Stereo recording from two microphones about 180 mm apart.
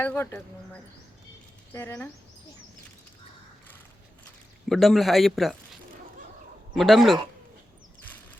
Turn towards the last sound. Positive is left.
turn(degrees=0)  # may be behind; listen again after turning